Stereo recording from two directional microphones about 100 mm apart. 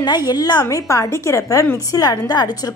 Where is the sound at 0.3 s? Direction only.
40° left (ahead or behind).